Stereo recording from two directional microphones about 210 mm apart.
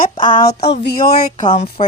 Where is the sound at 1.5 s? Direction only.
30° left (ahead or behind).